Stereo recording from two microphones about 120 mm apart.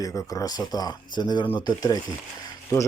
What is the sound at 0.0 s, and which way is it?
Speech, 25° left (ahead or behind).